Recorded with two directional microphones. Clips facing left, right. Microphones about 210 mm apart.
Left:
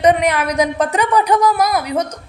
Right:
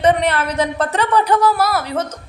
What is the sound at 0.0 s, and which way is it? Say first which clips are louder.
A woman's voice: left 2 dB; 10° left (ahead or behind).